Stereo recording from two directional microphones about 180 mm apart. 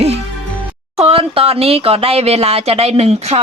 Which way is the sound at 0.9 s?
30° right (ahead or behind).